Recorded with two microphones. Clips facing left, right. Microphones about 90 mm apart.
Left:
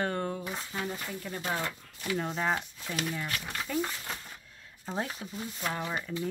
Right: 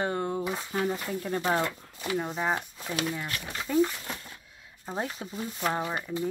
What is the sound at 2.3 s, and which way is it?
Speech, 5° right (ahead or behind).